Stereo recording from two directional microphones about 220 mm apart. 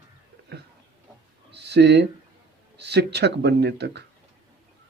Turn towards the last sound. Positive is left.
turn(degrees=-50)  # may be behind; listen again after turning